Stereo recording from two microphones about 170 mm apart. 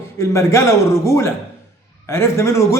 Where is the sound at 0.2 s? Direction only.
15° left (ahead or behind).